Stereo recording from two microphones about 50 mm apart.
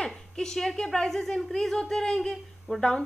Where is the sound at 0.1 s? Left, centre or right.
Centre.